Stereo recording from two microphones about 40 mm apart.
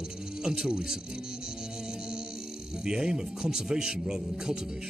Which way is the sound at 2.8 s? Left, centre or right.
Centre.